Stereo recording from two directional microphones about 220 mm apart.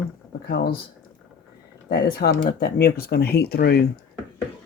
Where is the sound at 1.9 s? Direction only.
45° left (ahead or behind).